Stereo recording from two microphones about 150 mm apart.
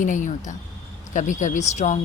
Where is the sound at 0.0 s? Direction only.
60° left (ahead or behind).